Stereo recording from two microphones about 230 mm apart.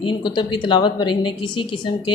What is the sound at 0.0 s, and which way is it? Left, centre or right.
A woman's voice, centre.